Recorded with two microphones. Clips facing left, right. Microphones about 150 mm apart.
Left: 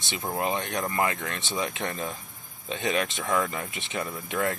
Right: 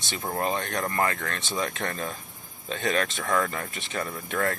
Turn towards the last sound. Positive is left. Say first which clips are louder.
# even
turn(degrees=15)  # may be behind; listen again after turning